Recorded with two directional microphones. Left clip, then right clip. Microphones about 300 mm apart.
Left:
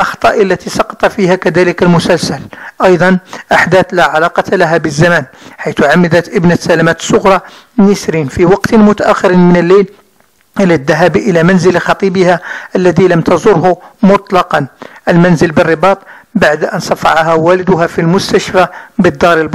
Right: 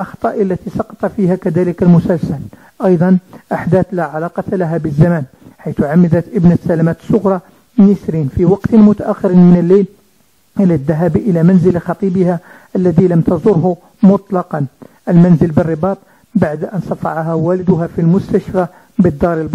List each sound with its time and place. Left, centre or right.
0.0 s speech: centre